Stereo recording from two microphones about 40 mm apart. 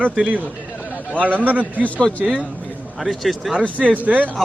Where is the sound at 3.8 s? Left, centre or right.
Right.